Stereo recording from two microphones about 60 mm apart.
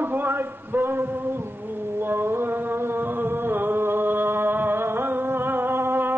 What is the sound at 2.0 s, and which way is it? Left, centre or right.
Mantra, right.